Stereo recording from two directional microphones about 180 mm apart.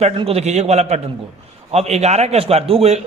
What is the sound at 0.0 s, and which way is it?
A man's voice, 35° right (ahead or behind).